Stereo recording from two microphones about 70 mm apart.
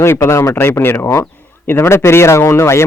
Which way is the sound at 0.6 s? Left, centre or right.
Left.